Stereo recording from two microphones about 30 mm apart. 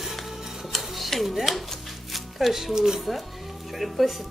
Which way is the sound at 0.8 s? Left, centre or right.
Centre.